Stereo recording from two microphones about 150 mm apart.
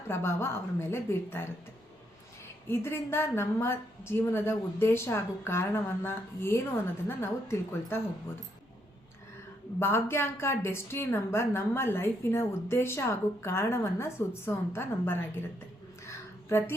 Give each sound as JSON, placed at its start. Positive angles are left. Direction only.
{"t": 0.1, "sound": "a woman's voice", "side_deg": 15}
{"t": 2.6, "sound": "a woman's voice", "side_deg": 15}
{"t": 9.8, "sound": "a woman's voice", "side_deg": 15}
{"t": 16.0, "sound": "a sound", "side_deg": 15}